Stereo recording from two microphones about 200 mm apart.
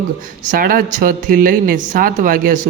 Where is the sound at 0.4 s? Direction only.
45° right (ahead or behind).